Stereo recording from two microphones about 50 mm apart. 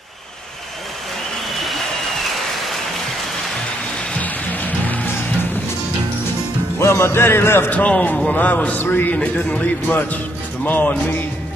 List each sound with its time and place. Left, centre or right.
1.5 s applause: centre
4.2 s music: left
6.8 s music: left
7.7 s speech: left
9.2 s speech: left